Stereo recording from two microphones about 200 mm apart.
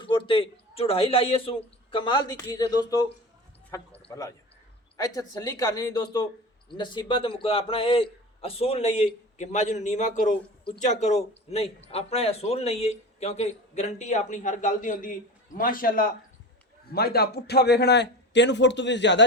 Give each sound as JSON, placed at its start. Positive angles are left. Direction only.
{"t": 0.0, "sound": "a man's voice", "side_deg": 25}